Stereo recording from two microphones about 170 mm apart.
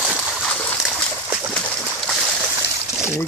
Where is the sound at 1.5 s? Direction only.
5° left (ahead or behind).